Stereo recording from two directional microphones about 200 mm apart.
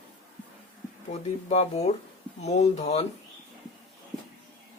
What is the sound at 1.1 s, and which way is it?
Speech, 35° left (ahead or behind).